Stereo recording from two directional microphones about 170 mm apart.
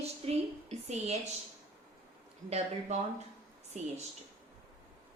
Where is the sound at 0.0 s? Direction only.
40° right (ahead or behind).